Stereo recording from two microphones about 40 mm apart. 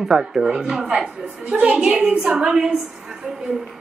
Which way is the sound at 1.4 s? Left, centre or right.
Right.